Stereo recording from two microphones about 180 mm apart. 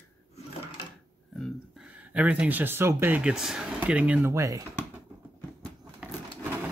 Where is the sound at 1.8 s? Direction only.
10° right (ahead or behind).